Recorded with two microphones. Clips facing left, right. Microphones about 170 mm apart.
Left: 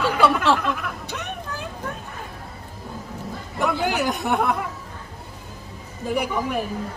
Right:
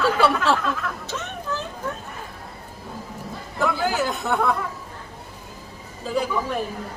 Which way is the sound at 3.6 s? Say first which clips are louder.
Even; 20° left (ahead or behind).